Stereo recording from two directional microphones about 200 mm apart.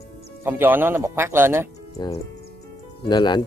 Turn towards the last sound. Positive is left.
turn(degrees=20)  # may be behind; listen again after turning